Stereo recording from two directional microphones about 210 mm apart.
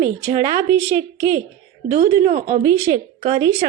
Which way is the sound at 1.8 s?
40° right (ahead or behind).